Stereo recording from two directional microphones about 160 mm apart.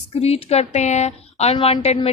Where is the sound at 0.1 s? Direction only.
40° left (ahead or behind).